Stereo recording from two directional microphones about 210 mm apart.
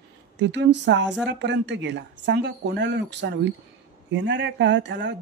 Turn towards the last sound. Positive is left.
turn(degrees=-60)  # may be behind; listen again after turning